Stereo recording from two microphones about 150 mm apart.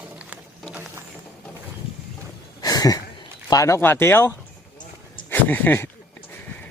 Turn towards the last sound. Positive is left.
turn(degrees=15)  # may be behind; listen again after turning